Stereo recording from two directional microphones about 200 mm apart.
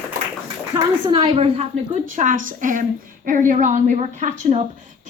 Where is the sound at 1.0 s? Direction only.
25° right (ahead or behind).